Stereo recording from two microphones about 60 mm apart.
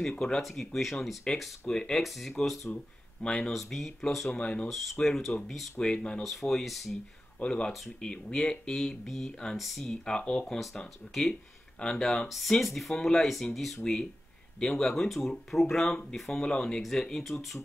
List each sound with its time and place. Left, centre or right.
0.4 s speech: centre
1.3 s speech: centre
2.7 s speech: centre
4.4 s speech: centre
4.6 s speech: centre
7.3 s speech: centre